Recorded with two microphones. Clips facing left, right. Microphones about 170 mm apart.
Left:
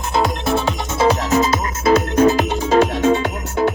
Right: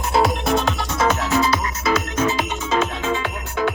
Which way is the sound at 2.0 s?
35° left (ahead or behind).